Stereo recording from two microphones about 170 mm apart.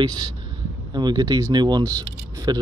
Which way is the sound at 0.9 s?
25° right (ahead or behind).